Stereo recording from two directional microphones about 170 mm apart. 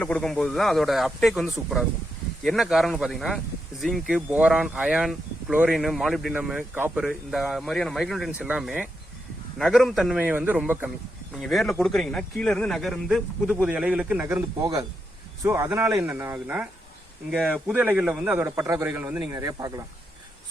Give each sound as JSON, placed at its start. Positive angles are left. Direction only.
{"t": 0.0, "sound": "a man's voice", "side_deg": 5}